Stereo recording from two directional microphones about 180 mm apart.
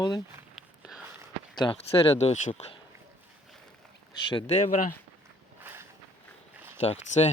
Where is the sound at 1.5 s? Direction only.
25° left (ahead or behind).